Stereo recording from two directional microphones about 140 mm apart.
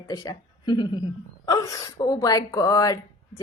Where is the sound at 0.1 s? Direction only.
25° left (ahead or behind).